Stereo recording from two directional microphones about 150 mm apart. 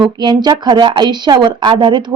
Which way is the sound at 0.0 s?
30° right (ahead or behind).